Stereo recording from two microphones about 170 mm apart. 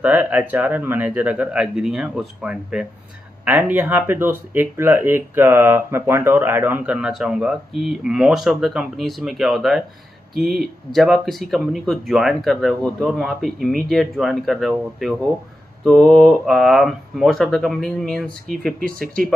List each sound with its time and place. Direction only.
0.0 s speech: 10° right (ahead or behind)
15.8 s speech: centre (ahead or behind)
18.8 s speech: 55° right (ahead or behind)